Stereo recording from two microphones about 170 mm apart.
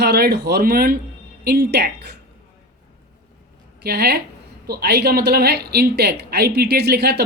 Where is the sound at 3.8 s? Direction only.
70° right (ahead or behind).